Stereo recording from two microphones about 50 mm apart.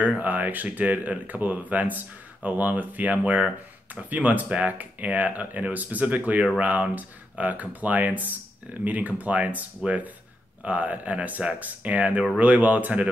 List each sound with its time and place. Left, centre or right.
0.0 s speech: right